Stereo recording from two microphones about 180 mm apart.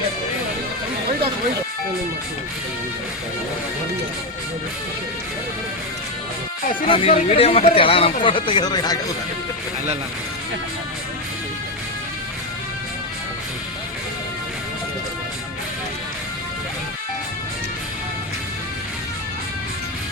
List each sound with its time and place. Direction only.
6.8 s speech: 30° left (ahead or behind)